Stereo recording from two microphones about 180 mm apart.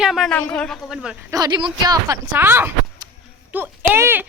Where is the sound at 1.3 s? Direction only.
20° right (ahead or behind).